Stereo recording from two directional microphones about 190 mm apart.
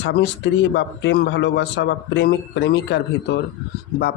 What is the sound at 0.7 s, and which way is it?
A man's voice, 65° left (ahead or behind).